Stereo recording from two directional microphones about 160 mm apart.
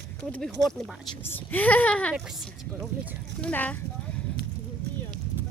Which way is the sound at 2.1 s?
5° right (ahead or behind).